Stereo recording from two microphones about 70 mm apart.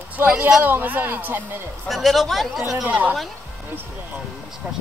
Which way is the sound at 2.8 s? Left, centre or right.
Right.